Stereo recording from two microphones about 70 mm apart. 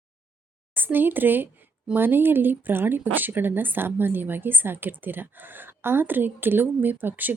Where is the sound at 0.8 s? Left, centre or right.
Right.